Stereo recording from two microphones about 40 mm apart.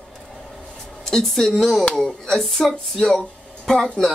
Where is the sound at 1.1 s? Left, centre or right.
Centre.